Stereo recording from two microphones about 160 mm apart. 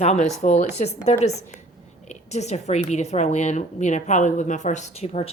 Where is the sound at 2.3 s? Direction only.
45° left (ahead or behind).